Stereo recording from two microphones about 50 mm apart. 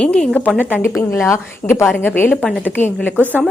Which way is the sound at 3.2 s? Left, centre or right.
Right.